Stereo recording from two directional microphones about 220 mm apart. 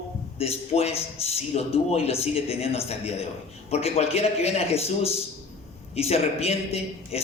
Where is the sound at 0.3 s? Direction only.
25° left (ahead or behind).